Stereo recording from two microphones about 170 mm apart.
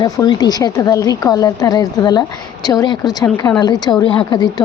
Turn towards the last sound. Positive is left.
turn(degrees=25)  # may be behind; listen again after turning